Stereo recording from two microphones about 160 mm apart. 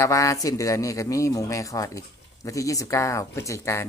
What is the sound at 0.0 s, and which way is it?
Speech, 20° left (ahead or behind).